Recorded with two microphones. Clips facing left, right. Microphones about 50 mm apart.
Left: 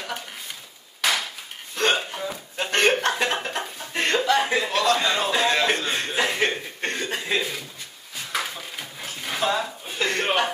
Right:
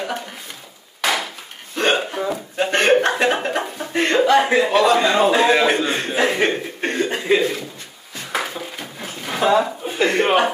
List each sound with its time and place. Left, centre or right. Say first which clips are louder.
1.0 s hammer: right 3 dB; centre
1.8 s speech: right 4 dB; centre
3.9 s a sound: right 6 dB; centre
4.6 s a man's voice: right 6 dB; centre
8.3 s a sound: right 5 dB; centre
9.4 s speech: right 9 dB; centre